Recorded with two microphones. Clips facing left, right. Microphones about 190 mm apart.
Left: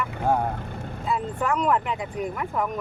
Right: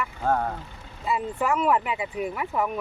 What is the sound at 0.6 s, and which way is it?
Vehicle, 55° left (ahead or behind).